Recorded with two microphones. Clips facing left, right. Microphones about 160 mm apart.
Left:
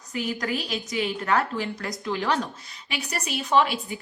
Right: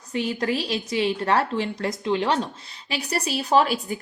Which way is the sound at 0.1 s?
30° right (ahead or behind).